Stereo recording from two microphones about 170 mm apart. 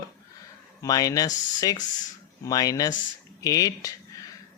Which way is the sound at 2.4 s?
20° left (ahead or behind).